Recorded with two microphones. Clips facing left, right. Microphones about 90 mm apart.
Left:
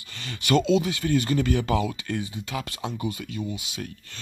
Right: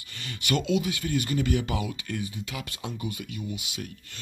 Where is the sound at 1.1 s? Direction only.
40° left (ahead or behind).